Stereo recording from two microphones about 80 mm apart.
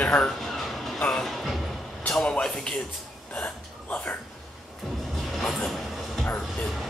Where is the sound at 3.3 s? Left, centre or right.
Centre.